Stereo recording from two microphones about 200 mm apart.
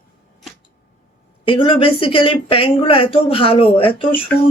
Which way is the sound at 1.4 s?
25° left (ahead or behind).